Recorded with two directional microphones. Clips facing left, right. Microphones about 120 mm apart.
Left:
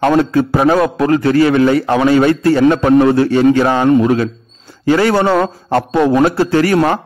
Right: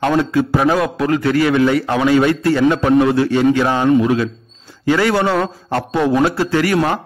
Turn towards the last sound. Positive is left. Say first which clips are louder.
# left 4 dB
turn(degrees=40)  # may be behind; listen again after turning